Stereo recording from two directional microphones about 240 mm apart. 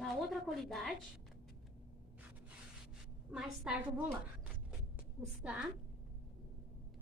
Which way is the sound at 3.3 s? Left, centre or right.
Centre.